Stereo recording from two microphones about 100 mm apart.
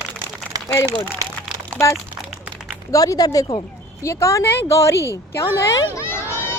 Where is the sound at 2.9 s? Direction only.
35° left (ahead or behind).